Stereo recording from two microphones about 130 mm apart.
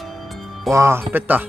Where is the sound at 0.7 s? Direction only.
20° right (ahead or behind).